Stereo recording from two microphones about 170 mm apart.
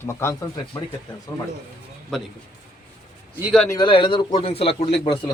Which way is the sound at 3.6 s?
25° left (ahead or behind).